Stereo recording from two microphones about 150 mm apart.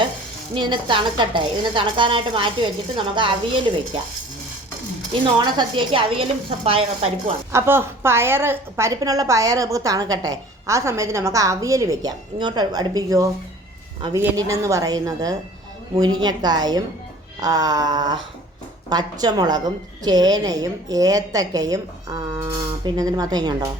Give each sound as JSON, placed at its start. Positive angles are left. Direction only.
{"t": 0.5, "sound": "a woman's voice", "side_deg": -30}
{"t": 5.1, "sound": "a woman's voice", "side_deg": -35}
{"t": 7.5, "sound": "a woman's voice", "side_deg": -15}
{"t": 14.3, "sound": "a woman's voice", "side_deg": -20}